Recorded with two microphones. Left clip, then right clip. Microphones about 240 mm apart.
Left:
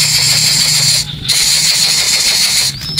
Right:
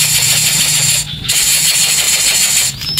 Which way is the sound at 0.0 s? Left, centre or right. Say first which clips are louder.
Left 2 dB; centre.